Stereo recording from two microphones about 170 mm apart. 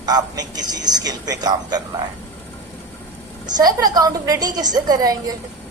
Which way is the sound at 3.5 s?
25° right (ahead or behind).